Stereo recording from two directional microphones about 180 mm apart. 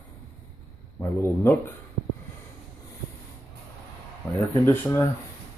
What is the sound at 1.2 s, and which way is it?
Speech, 10° left (ahead or behind).